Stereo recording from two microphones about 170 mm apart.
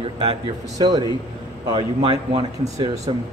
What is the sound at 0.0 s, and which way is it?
Speech, 30° right (ahead or behind).